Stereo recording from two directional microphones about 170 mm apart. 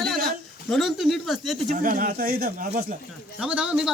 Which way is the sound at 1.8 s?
55° right (ahead or behind).